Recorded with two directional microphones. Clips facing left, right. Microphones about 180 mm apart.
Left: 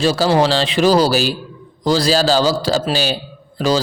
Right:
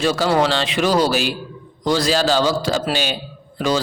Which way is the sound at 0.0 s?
30° left (ahead or behind).